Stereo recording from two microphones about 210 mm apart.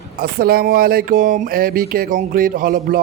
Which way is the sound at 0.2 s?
45° right (ahead or behind).